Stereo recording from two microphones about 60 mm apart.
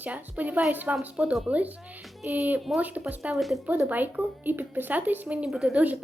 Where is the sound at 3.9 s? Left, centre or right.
Right.